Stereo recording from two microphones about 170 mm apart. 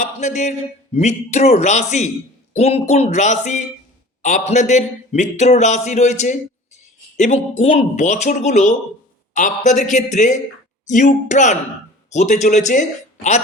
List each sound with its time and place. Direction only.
0.0 s speech: 45° left (ahead or behind)